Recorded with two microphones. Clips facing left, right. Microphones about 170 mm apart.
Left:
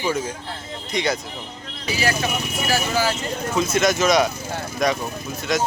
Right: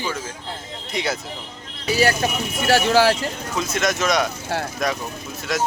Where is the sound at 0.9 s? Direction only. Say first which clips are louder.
Left 2 dB; 5° right (ahead or behind).